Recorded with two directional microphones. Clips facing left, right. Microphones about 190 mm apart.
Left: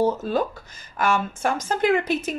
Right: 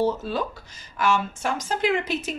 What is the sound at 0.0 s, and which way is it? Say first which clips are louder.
A woman's voice: left 3 dB; 50° left (ahead or behind).